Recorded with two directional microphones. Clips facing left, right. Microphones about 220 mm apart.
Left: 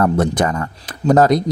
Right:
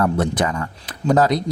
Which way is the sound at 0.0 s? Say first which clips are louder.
Left 3 dB; 45° left (ahead or behind).